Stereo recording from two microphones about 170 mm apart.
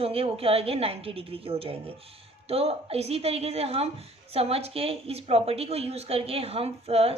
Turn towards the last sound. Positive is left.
turn(degrees=-35)  # may be behind; listen again after turning